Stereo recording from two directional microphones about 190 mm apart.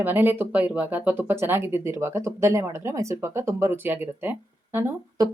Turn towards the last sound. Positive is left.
turn(degrees=-10)  # may be behind; listen again after turning